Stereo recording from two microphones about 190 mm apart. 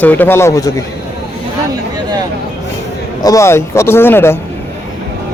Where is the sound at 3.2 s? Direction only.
15° left (ahead or behind).